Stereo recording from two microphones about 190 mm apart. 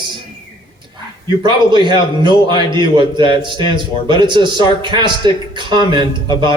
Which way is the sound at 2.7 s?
25° right (ahead or behind).